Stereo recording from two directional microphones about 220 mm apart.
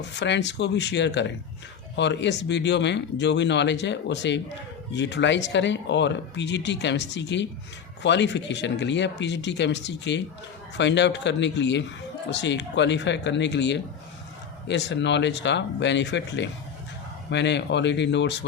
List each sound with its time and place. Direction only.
0.2 s speech: 50° left (ahead or behind)